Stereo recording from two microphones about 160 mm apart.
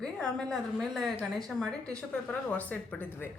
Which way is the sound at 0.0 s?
5° left (ahead or behind).